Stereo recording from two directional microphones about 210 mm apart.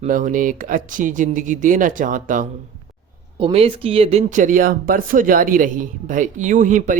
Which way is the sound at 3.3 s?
25° right (ahead or behind).